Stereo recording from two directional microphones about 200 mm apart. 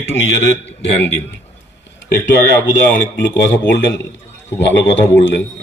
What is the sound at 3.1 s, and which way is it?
A man's voice, 65° left (ahead or behind).